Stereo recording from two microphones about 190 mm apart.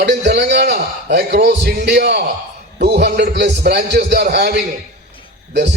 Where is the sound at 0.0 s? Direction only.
65° right (ahead or behind).